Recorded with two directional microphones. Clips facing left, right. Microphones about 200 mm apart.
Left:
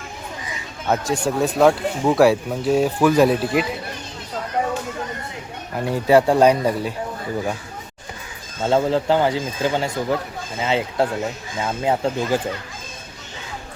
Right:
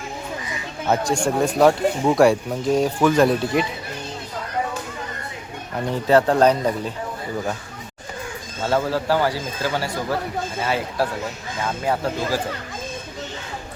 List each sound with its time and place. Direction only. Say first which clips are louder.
0.9 s speech: even; centre (ahead or behind)
5.9 s speech: left 2 dB; 10° left (ahead or behind)
8.6 s speech: left 3 dB; 20° left (ahead or behind)